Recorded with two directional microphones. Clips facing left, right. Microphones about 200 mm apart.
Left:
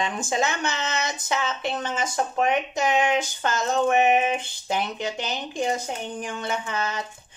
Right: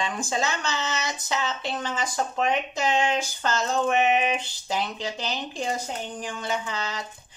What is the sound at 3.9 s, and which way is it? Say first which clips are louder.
Speech: left 2 dB; 20° left (ahead or behind).